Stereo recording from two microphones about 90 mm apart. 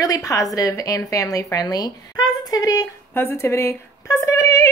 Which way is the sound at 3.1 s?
25° left (ahead or behind).